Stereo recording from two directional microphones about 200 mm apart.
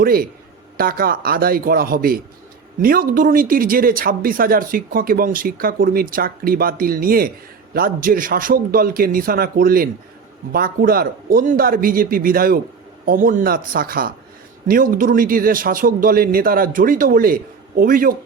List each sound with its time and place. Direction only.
0.0 s speech: 45° right (ahead or behind)